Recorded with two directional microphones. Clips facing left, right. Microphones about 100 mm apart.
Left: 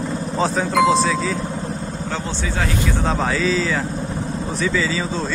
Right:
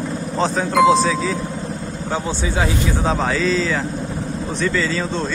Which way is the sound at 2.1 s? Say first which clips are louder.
Right 5 dB; 15° right (ahead or behind).